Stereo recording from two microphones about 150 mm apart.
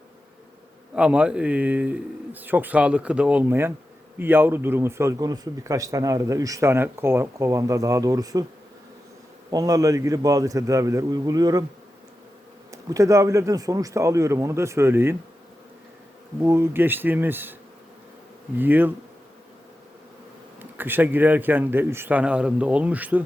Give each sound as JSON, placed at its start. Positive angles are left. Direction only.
{"t": 0.9, "sound": "speech", "side_deg": -5}
{"t": 9.5, "sound": "speech", "side_deg": -25}
{"t": 12.7, "sound": "speech", "side_deg": -20}
{"t": 16.4, "sound": "speech", "side_deg": -15}
{"t": 18.5, "sound": "speech", "side_deg": -15}
{"t": 20.6, "sound": "speech", "side_deg": -15}